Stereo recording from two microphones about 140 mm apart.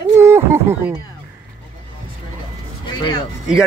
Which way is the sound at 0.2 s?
20° right (ahead or behind).